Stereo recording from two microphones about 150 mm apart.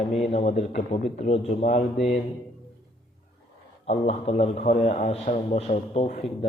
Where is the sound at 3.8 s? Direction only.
45° left (ahead or behind).